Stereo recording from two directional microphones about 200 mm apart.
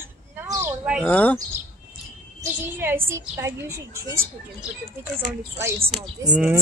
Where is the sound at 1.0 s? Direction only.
5° left (ahead or behind).